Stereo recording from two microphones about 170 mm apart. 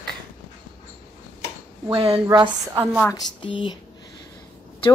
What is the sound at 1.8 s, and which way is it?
Speech, 20° right (ahead or behind).